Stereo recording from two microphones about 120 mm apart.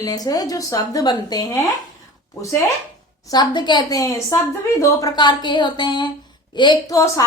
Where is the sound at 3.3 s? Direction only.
35° left (ahead or behind).